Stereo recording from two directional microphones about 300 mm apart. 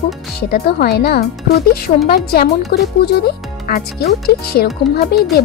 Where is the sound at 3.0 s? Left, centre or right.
Left.